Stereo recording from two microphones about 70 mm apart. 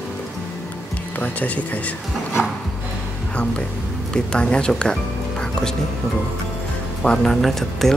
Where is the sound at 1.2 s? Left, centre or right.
Left.